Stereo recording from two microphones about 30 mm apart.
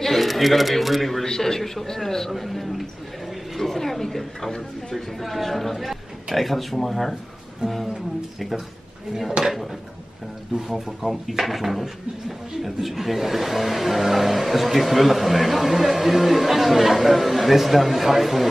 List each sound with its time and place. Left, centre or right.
0.0 s speech: centre
1.2 s a man's voice: centre
1.6 s a woman's voice: centre
7.6 s speech: right
9.4 s speech: centre
11.0 s speech: centre